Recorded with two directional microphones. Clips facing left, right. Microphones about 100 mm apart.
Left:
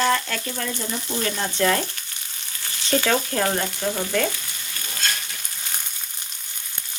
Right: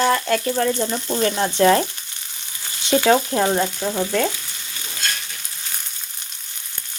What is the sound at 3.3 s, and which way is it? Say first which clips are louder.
Speech: right 4 dB; 20° right (ahead or behind).